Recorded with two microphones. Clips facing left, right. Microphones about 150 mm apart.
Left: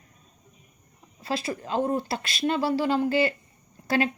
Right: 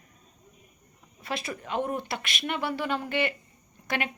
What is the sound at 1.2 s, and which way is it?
Speech, 30° left (ahead or behind).